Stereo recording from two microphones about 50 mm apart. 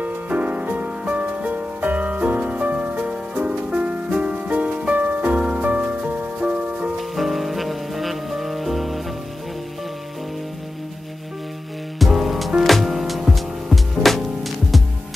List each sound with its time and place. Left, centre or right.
0.0 s music: right
7.0 s music: centre
12.0 s music: centre